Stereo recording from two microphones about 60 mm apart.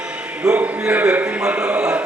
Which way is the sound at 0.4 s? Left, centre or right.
Centre.